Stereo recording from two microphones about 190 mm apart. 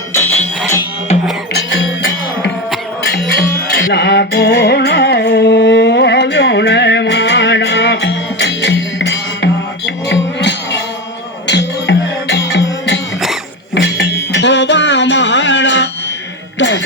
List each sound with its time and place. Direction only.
0.1 s music: 10° left (ahead or behind)
1.5 s music: 80° left
3.1 s music: 60° left (ahead or behind)